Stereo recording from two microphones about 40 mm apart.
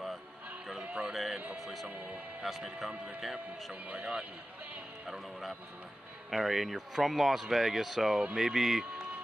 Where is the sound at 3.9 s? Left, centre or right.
Right.